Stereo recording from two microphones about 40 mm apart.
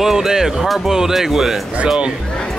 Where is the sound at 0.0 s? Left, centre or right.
Centre.